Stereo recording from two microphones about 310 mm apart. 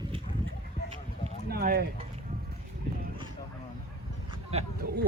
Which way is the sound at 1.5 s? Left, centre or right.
Right.